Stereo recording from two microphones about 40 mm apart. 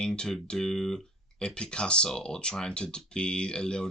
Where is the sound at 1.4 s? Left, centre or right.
Left.